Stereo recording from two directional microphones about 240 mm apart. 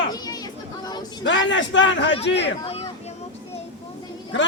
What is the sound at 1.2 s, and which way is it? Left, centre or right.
Speech, left.